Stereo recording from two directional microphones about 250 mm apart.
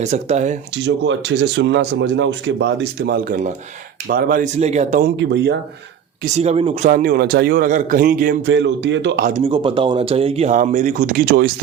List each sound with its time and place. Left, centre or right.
0.0 s speech: right
0.9 s a man's voice: right
6.3 s a man's voice: right
9.4 s speech: centre; by 11.5 s right